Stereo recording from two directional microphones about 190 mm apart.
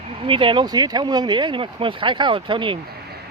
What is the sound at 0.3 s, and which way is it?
Speech, 25° right (ahead or behind).